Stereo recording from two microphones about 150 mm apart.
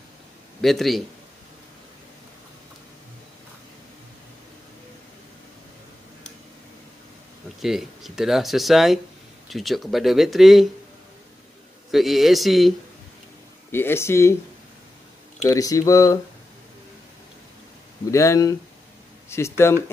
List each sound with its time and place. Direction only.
0.6 s speech: centre (ahead or behind)
7.6 s speech: 5° right (ahead or behind)
11.9 s speech: centre (ahead or behind)
13.7 s speech: 15° left (ahead or behind)
15.4 s speech: 20° left (ahead or behind)
18.1 s speech: 20° left (ahead or behind)